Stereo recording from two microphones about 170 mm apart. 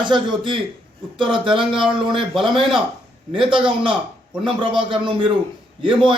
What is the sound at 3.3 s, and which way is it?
A man's voice, 30° right (ahead or behind).